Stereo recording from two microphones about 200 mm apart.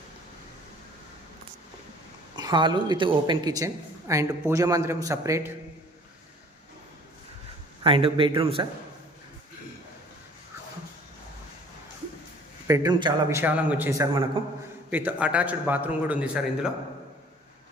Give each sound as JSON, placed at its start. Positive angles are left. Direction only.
{"t": 2.3, "sound": "speech", "side_deg": -20}
{"t": 7.9, "sound": "a man's voice", "side_deg": -25}
{"t": 12.6, "sound": "a man's voice", "side_deg": -20}
{"t": 13.4, "sound": "speech", "side_deg": -10}
{"t": 14.4, "sound": "a man's voice", "side_deg": -25}
{"t": 14.8, "sound": "speech", "side_deg": -10}